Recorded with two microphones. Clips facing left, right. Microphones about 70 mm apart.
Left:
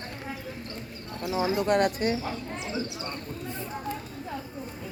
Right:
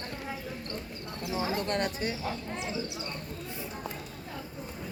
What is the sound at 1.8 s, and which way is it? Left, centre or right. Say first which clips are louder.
Speech: left 7 dB; left.